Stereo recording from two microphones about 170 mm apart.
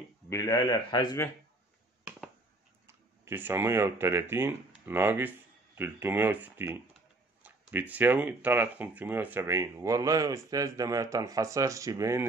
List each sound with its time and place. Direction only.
0.3 s speech: 20° left (ahead or behind)
2.0 s finger snapping: 5° right (ahead or behind)
2.9 s speech: 15° right (ahead or behind)